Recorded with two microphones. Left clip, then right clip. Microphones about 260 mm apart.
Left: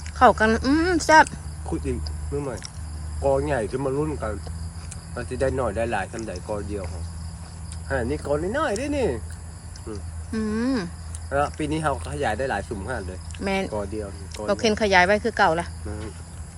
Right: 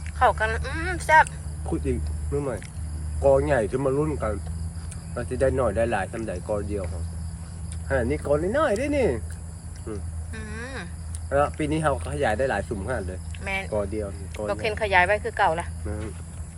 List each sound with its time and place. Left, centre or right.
0.2 s speech: left
1.6 s speech: centre
7.9 s speech: centre
10.3 s speech: centre
11.3 s speech: centre
13.4 s speech: centre
13.7 s speech: centre
14.3 s speech: left
15.9 s speech: centre